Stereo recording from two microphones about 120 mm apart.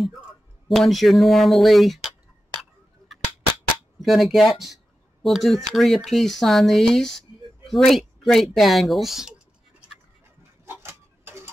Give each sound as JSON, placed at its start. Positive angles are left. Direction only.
{"t": 0.7, "sound": "speech", "side_deg": 0}
{"t": 4.0, "sound": "speech", "side_deg": 0}
{"t": 10.6, "sound": "tick-tock", "side_deg": -20}